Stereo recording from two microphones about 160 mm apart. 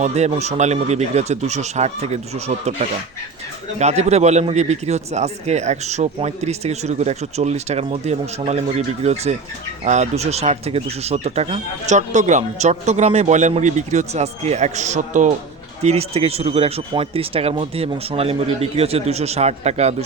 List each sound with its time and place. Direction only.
0.0 s a man's voice: 45° right (ahead or behind)
3.8 s a man's voice: 45° right (ahead or behind)
9.8 s a man's voice: 45° right (ahead or behind)